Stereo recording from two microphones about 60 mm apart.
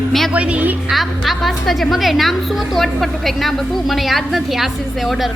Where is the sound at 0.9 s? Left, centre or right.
Centre.